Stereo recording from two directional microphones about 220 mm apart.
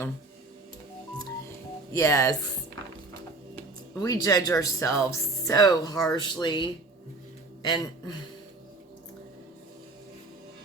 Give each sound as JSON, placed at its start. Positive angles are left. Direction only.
{"t": 1.9, "sound": "speech", "side_deg": 15}
{"t": 4.0, "sound": "speech", "side_deg": 15}